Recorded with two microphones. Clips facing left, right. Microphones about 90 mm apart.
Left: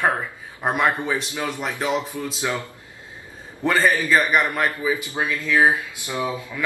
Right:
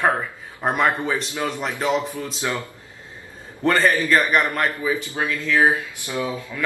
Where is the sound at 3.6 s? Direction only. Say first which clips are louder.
Right 1 dB; 5° left (ahead or behind).